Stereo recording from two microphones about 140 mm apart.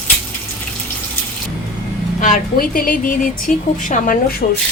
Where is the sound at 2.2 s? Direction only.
90° left.